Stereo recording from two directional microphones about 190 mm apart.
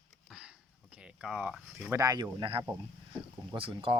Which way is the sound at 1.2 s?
5° right (ahead or behind).